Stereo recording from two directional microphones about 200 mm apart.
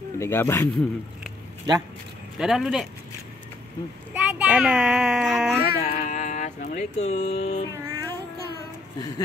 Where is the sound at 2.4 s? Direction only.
Centre (ahead or behind).